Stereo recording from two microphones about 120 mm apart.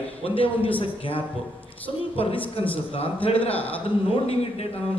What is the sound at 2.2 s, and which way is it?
A man's voice, 45° left (ahead or behind).